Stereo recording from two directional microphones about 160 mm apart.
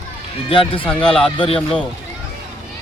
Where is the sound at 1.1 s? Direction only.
5° left (ahead or behind).